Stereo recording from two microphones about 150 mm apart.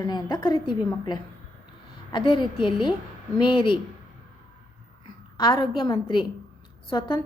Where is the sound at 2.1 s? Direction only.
35° left (ahead or behind).